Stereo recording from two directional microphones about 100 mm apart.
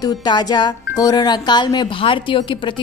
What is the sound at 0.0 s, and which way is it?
Speech, 45° left (ahead or behind).